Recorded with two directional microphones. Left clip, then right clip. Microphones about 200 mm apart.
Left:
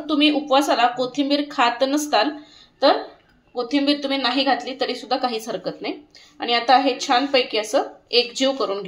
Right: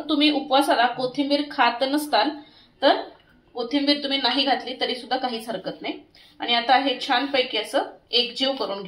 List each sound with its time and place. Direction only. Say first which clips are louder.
0.0 s speech: left 2 dB; 20° left (ahead or behind)
3.5 s a woman's voice: left 2 dB; 40° left (ahead or behind)